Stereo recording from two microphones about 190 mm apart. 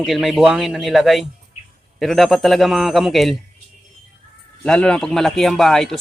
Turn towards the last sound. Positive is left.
turn(degrees=0)  # may be behind; listen again after turning